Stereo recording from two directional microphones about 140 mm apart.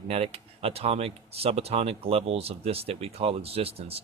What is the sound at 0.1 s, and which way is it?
Speech, 45° right (ahead or behind).